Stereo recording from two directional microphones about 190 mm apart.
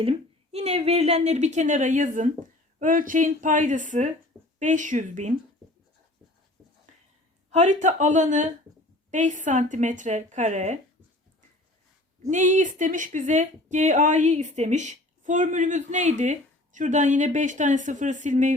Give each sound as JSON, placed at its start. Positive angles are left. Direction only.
{"t": 0.5, "sound": "a woman's voice", "side_deg": -35}
{"t": 7.5, "sound": "speech", "side_deg": -40}
{"t": 12.3, "sound": "speech", "side_deg": -40}